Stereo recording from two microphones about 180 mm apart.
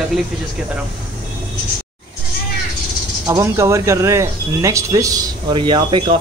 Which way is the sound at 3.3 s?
20° right (ahead or behind).